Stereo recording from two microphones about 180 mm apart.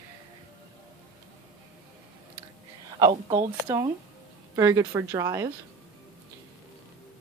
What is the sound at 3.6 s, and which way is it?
Speech, 20° right (ahead or behind).